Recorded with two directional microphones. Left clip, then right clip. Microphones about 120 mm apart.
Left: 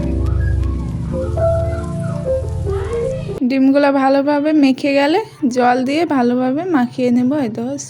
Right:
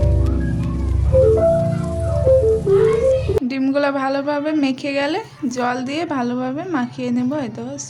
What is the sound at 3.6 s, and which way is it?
A woman's voice, 25° left (ahead or behind).